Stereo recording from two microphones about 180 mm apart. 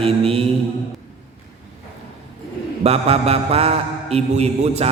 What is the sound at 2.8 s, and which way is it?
Mantra, 35° right (ahead or behind).